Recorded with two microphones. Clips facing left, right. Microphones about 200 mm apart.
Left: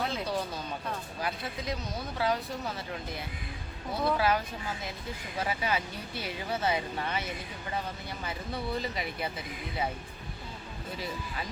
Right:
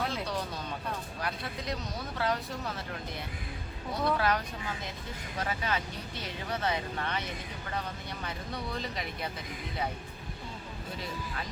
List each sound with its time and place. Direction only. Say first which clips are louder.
0.0 s a sound: left 1 dB; centre (ahead or behind)
0.9 s vehicle: left 1 dB; centre (ahead or behind)
2.1 s speech: left 2 dB; centre (ahead or behind)
3.9 s speech: left 1 dB; 5° left (ahead or behind)